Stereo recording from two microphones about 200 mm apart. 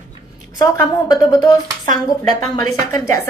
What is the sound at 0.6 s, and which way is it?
Speech, 20° left (ahead or behind).